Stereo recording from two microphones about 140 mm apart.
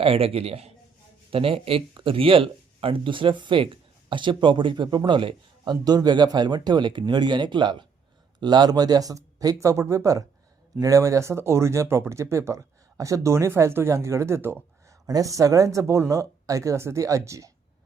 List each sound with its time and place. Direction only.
0.0 s a man's voice: 40° right (ahead or behind); by 17.5 s 20° right (ahead or behind)